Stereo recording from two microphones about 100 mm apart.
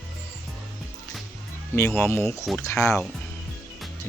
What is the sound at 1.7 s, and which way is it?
Speech, 25° left (ahead or behind).